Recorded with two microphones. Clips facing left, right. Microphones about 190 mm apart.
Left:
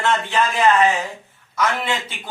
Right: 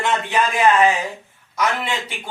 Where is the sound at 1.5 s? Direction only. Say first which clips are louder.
Even; 15° right (ahead or behind).